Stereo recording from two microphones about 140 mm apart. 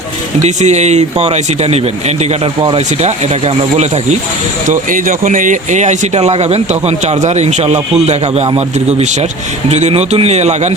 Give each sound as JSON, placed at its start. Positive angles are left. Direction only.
{"t": 0.4, "sound": "speech", "side_deg": -55}
{"t": 4.7, "sound": "speech", "side_deg": -70}
{"t": 9.6, "sound": "speech", "side_deg": -50}